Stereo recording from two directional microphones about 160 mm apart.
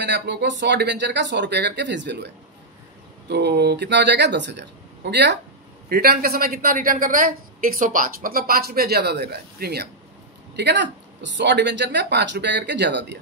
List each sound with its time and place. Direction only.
0.0 s speech: 90° right
5.9 s speech: 75° right (ahead or behind); by 13.2 s 90° right